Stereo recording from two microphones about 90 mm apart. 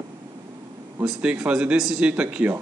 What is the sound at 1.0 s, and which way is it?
Speech, 15° right (ahead or behind).